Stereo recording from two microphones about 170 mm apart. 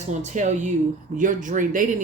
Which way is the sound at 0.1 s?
45° right (ahead or behind).